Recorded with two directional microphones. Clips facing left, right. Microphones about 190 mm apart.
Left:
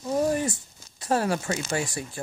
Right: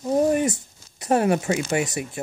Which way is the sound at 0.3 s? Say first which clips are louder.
Right 5 dB; 20° right (ahead or behind).